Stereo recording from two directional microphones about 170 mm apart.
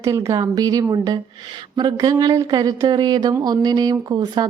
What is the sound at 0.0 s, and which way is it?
Speech, 15° right (ahead or behind).